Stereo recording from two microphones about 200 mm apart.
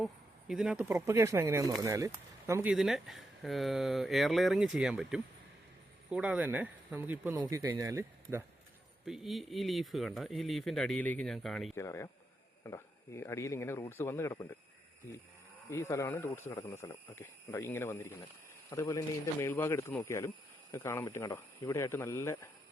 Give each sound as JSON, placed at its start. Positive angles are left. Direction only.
{"t": 0.0, "sound": "speech", "side_deg": 0}
{"t": 0.9, "sound": "speech", "side_deg": -15}
{"t": 2.7, "sound": "speech", "side_deg": 0}
{"t": 9.0, "sound": "speech", "side_deg": 0}
{"t": 11.8, "sound": "speech", "side_deg": 15}
{"t": 15.7, "sound": "speech", "side_deg": 15}